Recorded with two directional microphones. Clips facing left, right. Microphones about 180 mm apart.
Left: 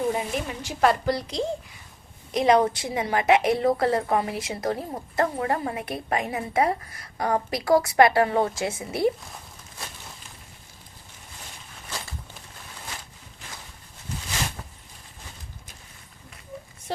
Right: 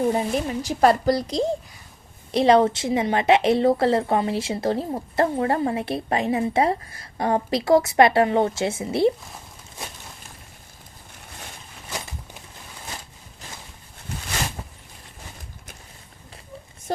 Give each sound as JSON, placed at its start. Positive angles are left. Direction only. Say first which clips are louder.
{"t": 0.1, "sound": "a woman's voice", "louder": "right 5 dB", "side_deg": -35}